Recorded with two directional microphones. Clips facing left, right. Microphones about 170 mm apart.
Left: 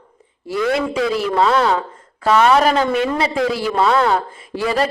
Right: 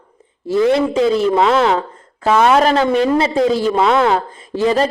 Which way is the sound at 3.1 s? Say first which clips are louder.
Right 5 dB; 25° right (ahead or behind).